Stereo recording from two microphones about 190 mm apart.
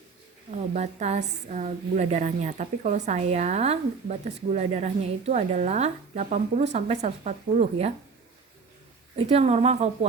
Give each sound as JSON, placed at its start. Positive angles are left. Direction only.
{"t": 0.7, "sound": "a woman's voice", "side_deg": -40}
{"t": 9.1, "sound": "a woman's voice", "side_deg": -35}